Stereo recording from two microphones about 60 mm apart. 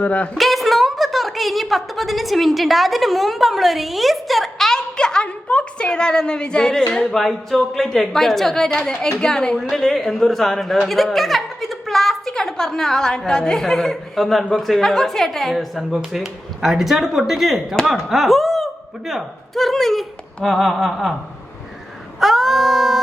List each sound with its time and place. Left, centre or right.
0.0 s speech: left
0.3 s a woman's voice: centre
22.2 s dog: centre